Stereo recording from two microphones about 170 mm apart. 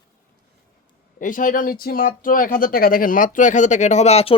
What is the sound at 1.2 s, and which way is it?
Speech, 50° left (ahead or behind).